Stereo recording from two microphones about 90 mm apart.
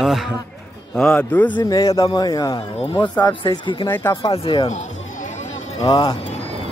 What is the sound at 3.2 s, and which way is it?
Speech, 60° left (ahead or behind).